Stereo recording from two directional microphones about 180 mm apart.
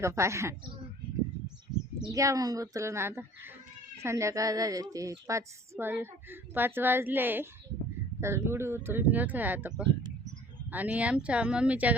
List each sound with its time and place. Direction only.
0.0 s a woman's voice: 15° right (ahead or behind)
2.0 s a woman's voice: 20° right (ahead or behind)